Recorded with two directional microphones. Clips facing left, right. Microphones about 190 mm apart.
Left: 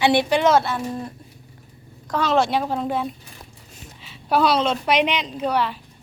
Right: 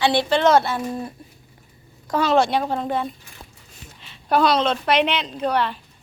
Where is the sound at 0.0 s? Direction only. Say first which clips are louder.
Even; 20° left (ahead or behind); by 0.8 s centre (ahead or behind).